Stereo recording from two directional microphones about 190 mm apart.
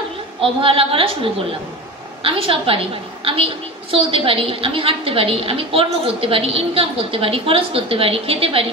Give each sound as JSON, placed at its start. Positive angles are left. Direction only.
{"t": 0.4, "sound": "a woman's voice", "side_deg": -30}